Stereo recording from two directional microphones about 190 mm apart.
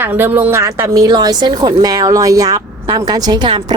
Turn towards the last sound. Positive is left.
turn(degrees=-20)  # may be behind; listen again after turning